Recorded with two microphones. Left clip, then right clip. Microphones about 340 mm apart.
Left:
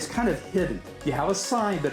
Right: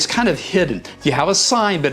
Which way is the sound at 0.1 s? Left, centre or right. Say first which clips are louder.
Right 9 dB; right.